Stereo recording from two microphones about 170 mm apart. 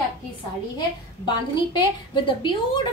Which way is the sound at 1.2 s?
25° left (ahead or behind).